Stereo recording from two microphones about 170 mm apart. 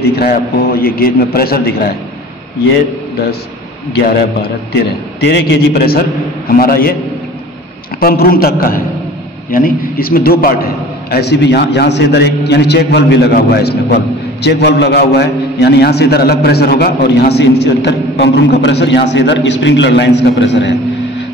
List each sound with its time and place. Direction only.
0.1 s a man's voice: 65° left (ahead or behind)
4.8 s a man's voice: 90° left; by 7.0 s 60° left (ahead or behind)
8.0 s a man's voice: 60° left (ahead or behind)
14.4 s a man's voice: 85° left